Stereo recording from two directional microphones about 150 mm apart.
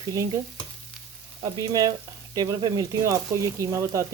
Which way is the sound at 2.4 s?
25° right (ahead or behind).